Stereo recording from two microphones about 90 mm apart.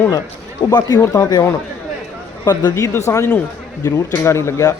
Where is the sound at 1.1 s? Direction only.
45° left (ahead or behind).